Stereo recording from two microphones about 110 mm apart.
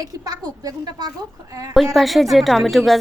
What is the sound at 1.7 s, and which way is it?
A woman's voice, centre (ahead or behind).